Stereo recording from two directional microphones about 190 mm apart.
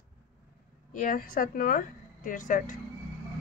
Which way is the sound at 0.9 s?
45° left (ahead or behind).